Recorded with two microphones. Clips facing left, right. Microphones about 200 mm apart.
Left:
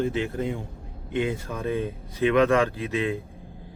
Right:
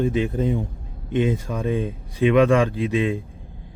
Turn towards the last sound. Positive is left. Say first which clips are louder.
# right 5 dB
turn(degrees=-15)  # may be behind; listen again after turning